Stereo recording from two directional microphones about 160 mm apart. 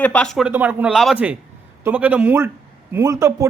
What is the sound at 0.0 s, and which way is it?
Speech, 5° left (ahead or behind).